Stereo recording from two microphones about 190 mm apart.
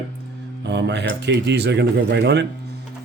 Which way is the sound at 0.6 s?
65° right (ahead or behind).